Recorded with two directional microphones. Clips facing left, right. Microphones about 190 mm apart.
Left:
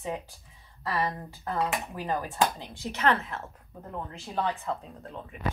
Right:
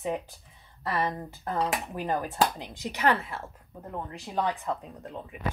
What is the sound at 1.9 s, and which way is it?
A woman's voice, 20° right (ahead or behind).